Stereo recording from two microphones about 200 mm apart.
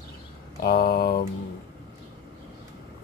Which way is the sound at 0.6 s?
50° left (ahead or behind).